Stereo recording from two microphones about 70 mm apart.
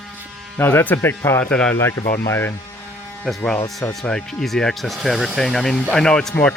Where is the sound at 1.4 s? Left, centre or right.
Centre.